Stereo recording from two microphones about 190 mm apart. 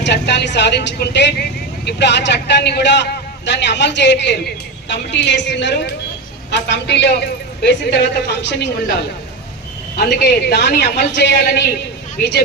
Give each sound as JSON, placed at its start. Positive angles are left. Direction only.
{"t": 0.0, "sound": "a woman's voice", "side_deg": 65}
{"t": 10.2, "sound": "a woman's voice", "side_deg": 60}